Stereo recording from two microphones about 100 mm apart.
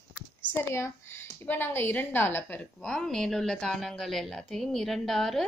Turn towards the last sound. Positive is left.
turn(degrees=5)  # may be behind; listen again after turning